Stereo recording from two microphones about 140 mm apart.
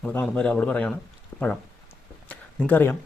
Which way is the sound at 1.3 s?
20° left (ahead or behind).